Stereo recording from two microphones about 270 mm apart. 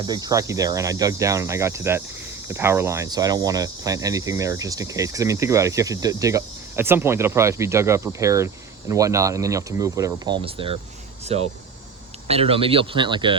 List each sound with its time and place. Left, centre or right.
0.1 s speech: centre